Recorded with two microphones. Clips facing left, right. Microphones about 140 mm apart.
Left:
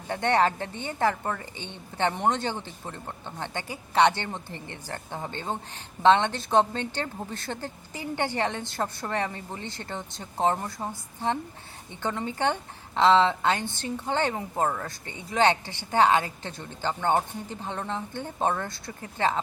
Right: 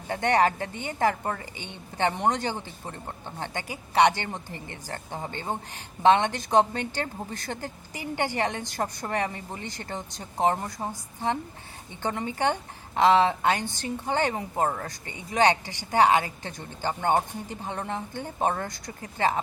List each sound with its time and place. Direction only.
0.3 s a woman's voice: 15° right (ahead or behind)